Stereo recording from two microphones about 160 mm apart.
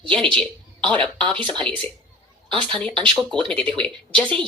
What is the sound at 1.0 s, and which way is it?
Speech, 30° right (ahead or behind).